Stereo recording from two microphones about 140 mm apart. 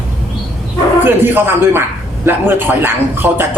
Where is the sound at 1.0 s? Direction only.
15° right (ahead or behind).